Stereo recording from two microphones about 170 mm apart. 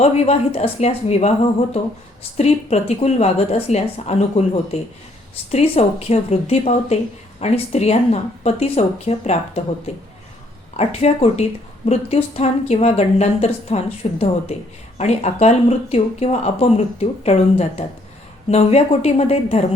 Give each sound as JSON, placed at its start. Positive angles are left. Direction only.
{"t": 0.0, "sound": "speech", "side_deg": 35}
{"t": 2.4, "sound": "speech", "side_deg": 40}
{"t": 10.8, "sound": "speech", "side_deg": 35}